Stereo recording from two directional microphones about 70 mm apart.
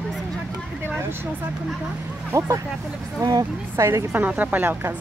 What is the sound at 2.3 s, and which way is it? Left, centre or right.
Speech, right.